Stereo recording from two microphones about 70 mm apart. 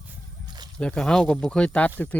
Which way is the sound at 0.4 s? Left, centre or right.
Right.